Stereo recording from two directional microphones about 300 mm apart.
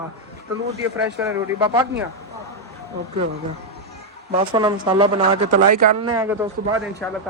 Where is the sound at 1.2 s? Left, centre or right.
Centre.